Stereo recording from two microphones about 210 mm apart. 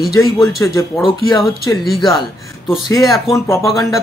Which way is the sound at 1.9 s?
Centre (ahead or behind).